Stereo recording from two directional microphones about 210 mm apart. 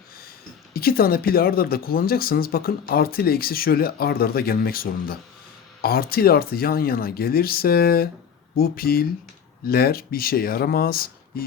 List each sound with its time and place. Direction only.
0.7 s speech: 45° left (ahead or behind)